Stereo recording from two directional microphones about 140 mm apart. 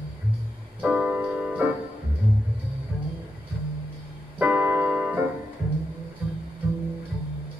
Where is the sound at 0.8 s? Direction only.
10° right (ahead or behind).